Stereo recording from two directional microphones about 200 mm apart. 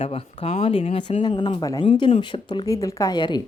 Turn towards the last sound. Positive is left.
turn(degrees=20)  # may be behind; listen again after turning